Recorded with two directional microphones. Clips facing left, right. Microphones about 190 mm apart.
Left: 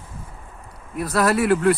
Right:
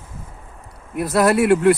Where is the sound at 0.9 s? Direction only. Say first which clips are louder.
Right 3 dB; 5° right (ahead or behind).